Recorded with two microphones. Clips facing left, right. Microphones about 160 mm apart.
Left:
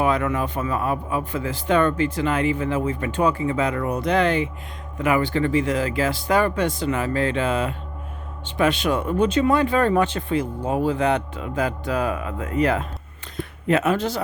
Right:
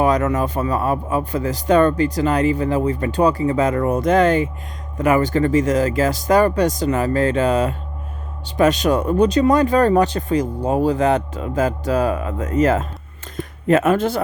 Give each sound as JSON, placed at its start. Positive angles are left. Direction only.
{"t": 0.0, "sound": "speech", "side_deg": -40}